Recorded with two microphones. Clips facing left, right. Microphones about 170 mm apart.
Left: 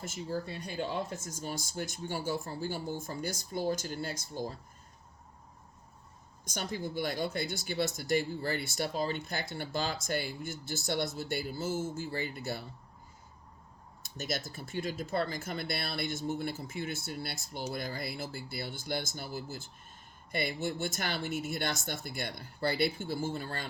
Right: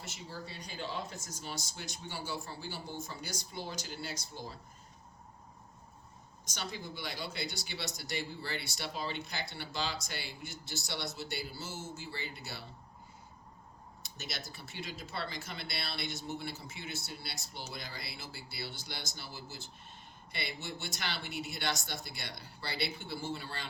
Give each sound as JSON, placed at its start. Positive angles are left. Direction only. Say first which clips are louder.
{"t": 0.0, "sound": "speech", "louder": "left 9 dB", "side_deg": 45}
{"t": 6.4, "sound": "speech", "louder": "left 6 dB", "side_deg": 50}
{"t": 14.0, "sound": "speech", "louder": "left 8 dB", "side_deg": 50}